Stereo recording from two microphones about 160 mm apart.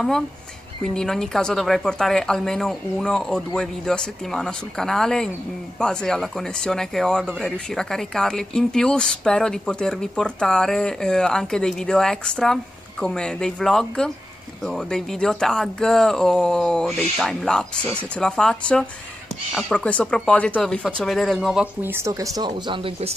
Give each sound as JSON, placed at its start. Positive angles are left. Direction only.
{"t": 0.9, "sound": "speech", "side_deg": 5}
{"t": 21.9, "sound": "speech", "side_deg": -20}